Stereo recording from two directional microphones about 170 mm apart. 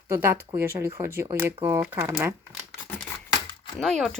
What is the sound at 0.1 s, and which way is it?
Speech, 15° right (ahead or behind).